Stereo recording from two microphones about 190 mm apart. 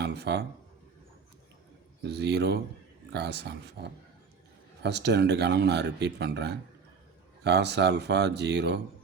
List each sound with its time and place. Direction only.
0.0 s speech: 60° right (ahead or behind)
2.0 s speech: 60° right (ahead or behind)